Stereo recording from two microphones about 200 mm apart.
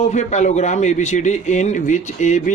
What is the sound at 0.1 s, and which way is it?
A man's voice, 35° left (ahead or behind).